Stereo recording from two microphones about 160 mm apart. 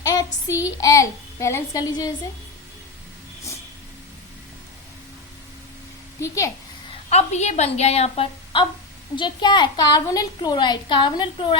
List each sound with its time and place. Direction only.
0.0 s child singing: 20° left (ahead or behind)
0.8 s a child's voice: 20° left (ahead or behind)
6.1 s a woman's voice: 20° left (ahead or behind)
7.1 s a woman's voice: 45° left (ahead or behind)